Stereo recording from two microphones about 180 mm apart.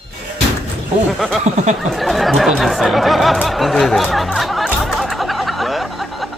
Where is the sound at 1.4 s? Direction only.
40° right (ahead or behind).